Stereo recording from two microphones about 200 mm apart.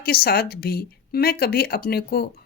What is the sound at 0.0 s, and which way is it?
Speech, 50° left (ahead or behind).